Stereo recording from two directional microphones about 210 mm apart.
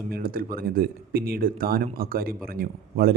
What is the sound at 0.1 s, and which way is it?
Speech, 45° right (ahead or behind).